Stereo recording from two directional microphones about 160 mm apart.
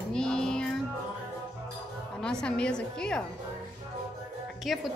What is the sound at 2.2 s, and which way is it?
A woman's voice, 5° left (ahead or behind).